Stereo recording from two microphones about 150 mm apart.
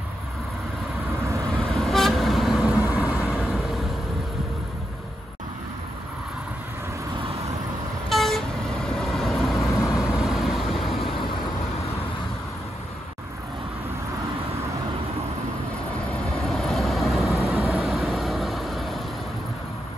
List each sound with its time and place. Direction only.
1.6 s vehicle: centre (ahead or behind)
8.1 s vehicle: centre (ahead or behind)
16.1 s vehicle: centre (ahead or behind)
17.4 s vehicle: 20° left (ahead or behind)
17.7 s vehicle: centre (ahead or behind)